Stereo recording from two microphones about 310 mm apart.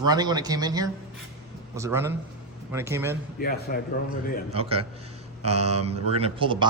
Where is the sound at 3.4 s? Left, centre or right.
Left.